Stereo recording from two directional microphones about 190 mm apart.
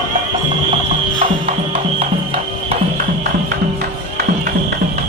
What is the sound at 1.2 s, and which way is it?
Music, 30° right (ahead or behind).